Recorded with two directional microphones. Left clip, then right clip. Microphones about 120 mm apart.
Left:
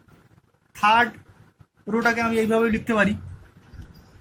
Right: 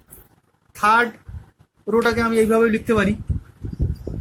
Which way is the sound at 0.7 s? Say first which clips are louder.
Right 2 dB; 40° right (ahead or behind).